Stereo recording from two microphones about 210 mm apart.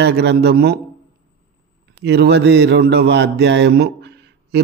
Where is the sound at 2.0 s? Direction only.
55° right (ahead or behind).